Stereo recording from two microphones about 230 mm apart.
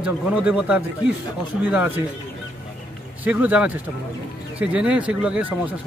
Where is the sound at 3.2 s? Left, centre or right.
Centre.